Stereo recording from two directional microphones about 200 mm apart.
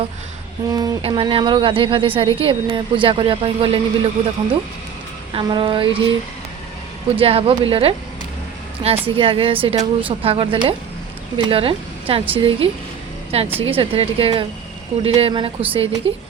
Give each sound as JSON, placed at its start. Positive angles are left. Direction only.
{"t": 0.7, "sound": "a woman's voice", "side_deg": -20}
{"t": 7.2, "sound": "a woman's voice", "side_deg": -30}
{"t": 9.0, "sound": "a woman's voice", "side_deg": -25}